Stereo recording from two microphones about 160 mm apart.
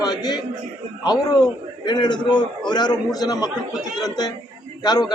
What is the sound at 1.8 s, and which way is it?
Speech, 25° left (ahead or behind).